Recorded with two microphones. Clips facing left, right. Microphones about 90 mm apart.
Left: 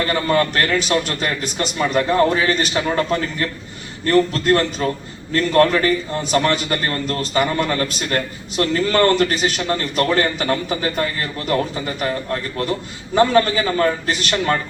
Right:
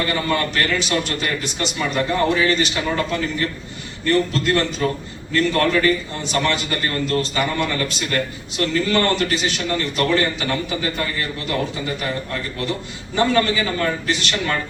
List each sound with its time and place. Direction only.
0.1 s a man's voice: 40° left (ahead or behind)